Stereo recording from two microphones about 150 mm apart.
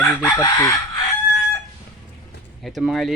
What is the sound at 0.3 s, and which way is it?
Speech, 20° left (ahead or behind).